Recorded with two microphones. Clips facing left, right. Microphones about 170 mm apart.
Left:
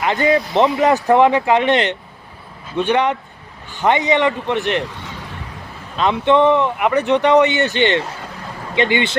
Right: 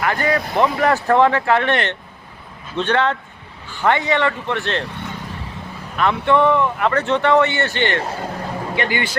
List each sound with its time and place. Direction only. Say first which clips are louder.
0.0 s speech: left 3 dB; 20° left (ahead or behind)
6.0 s speech: left 2 dB; 20° left (ahead or behind)